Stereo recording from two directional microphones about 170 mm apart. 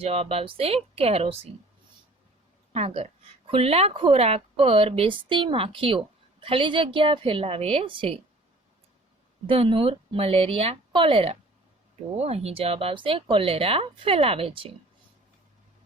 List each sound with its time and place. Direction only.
0.0 s speech: 35° right (ahead or behind)
2.7 s speech: 35° right (ahead or behind)
9.5 s speech: 30° right (ahead or behind)